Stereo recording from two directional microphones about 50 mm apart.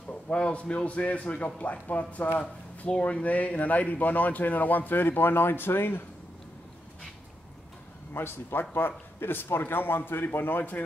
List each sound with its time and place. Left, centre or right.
0.1 s a man's voice: left
8.1 s a man's voice: left